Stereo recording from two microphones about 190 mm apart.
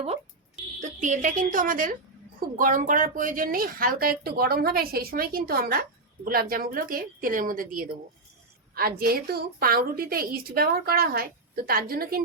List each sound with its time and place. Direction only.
0.8 s a woman's voice: 40° right (ahead or behind)